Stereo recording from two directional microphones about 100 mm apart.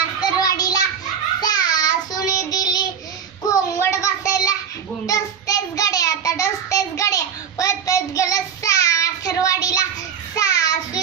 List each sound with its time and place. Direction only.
0.2 s child singing: 40° left (ahead or behind)